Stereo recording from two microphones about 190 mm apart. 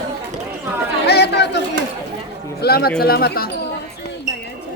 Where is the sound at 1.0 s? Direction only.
60° left (ahead or behind).